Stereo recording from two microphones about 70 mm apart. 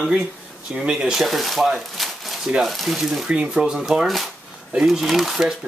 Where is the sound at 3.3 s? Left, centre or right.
Centre.